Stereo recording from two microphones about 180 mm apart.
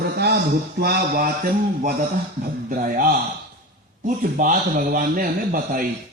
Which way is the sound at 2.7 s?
50° right (ahead or behind).